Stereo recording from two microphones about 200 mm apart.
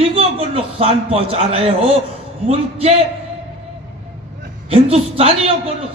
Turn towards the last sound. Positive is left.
turn(degrees=-30)  # may be behind; listen again after turning